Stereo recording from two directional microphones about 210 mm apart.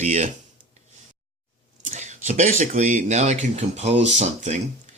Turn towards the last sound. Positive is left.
turn(degrees=-35)  # may be behind; listen again after turning